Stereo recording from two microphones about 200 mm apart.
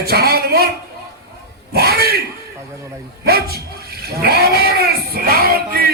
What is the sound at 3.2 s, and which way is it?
Speech, 50° right (ahead or behind).